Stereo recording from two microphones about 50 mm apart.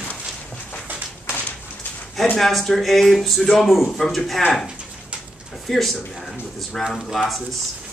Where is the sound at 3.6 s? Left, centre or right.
Centre.